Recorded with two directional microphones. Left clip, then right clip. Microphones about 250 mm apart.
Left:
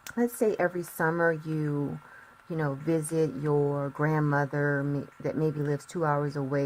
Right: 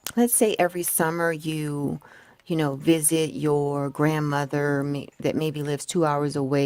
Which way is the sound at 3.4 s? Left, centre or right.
Right.